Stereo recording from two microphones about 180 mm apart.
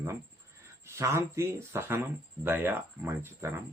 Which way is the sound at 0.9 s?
15° right (ahead or behind).